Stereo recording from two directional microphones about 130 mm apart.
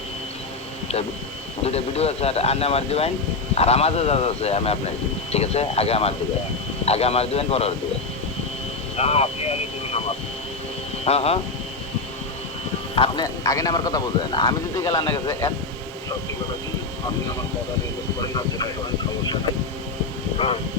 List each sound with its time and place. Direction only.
1.6 s speech: 50° left (ahead or behind)
9.0 s vehicle: 50° left (ahead or behind)
11.0 s speech: 50° left (ahead or behind)
13.0 s a man's voice: 30° left (ahead or behind)
15.3 s a man's voice: 20° left (ahead or behind)
18.2 s speech: 30° left (ahead or behind)